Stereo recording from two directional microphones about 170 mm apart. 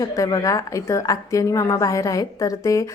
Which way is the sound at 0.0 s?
20° left (ahead or behind).